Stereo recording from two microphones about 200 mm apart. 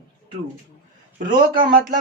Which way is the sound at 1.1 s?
45° right (ahead or behind).